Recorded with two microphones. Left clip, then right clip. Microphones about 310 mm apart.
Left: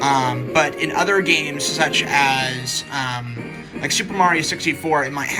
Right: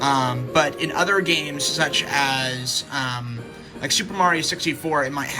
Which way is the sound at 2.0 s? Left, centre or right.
Centre.